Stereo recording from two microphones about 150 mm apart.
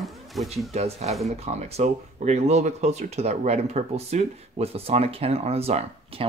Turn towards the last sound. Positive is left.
turn(degrees=-45)  # may be behind; listen again after turning